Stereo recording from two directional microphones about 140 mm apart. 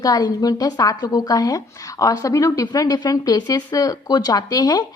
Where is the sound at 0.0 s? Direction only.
25° left (ahead or behind).